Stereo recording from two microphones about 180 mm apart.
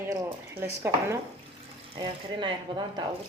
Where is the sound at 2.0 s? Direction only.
25° right (ahead or behind).